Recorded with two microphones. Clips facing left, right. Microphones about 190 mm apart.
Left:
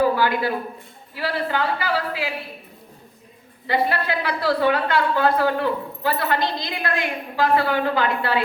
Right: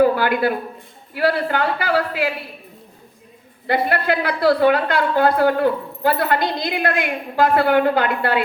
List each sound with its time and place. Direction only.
0.0 s a woman's voice: 55° right (ahead or behind)
3.7 s a woman's voice: 55° right (ahead or behind)